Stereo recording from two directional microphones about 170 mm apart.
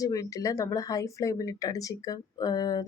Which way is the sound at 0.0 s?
20° left (ahead or behind).